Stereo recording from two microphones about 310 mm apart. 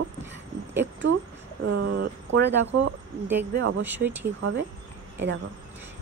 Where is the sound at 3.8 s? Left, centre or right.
Centre.